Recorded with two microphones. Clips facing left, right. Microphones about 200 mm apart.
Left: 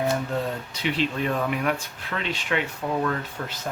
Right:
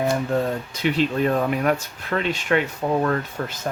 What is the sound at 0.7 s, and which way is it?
Speech, 45° right (ahead or behind).